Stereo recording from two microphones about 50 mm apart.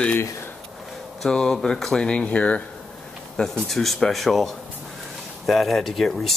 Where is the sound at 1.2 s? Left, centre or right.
Centre.